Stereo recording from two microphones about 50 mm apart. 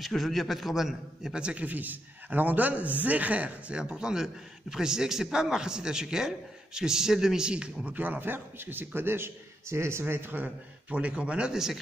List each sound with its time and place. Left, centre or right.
0.0 s a man's voice: centre
1.3 s speech: right
1.7 s speech: right
3.9 s a man's voice: centre
7.4 s speech: centre
7.8 s a man's voice: right
11.0 s speech: right
11.5 s a man's voice: centre